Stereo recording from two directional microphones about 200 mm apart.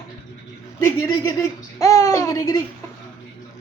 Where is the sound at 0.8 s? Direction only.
15° left (ahead or behind).